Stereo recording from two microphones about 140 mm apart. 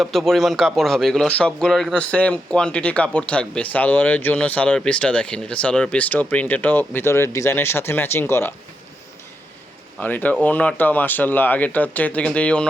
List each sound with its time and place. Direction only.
0.0 s speech: centre (ahead or behind)
10.0 s speech: 10° left (ahead or behind)